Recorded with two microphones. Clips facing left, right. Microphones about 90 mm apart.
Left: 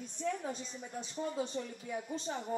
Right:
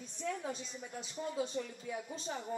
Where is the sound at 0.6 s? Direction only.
Centre (ahead or behind).